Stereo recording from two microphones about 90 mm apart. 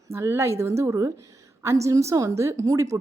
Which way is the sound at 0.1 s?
30° right (ahead or behind).